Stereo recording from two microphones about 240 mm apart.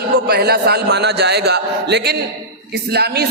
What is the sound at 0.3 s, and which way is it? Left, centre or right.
A man's voice, right.